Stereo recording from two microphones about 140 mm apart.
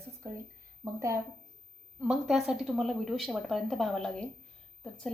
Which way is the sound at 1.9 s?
5° right (ahead or behind).